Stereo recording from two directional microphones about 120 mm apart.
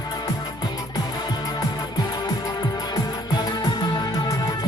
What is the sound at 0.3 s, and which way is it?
Music, 35° left (ahead or behind).